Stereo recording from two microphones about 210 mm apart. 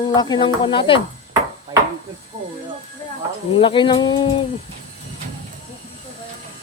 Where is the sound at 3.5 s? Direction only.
25° left (ahead or behind).